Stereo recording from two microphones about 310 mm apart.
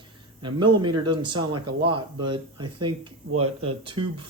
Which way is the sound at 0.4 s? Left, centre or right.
Centre.